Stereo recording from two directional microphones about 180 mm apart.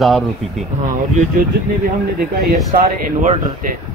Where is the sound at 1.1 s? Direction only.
40° right (ahead or behind).